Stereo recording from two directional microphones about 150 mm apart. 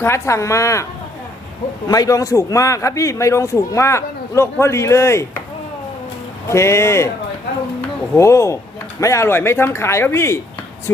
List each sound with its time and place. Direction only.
0.0 s a man's voice: 20° left (ahead or behind)
1.9 s a man's voice: 25° left (ahead or behind)
6.5 s speech: 20° left (ahead or behind)
8.1 s a man's voice: 20° left (ahead or behind)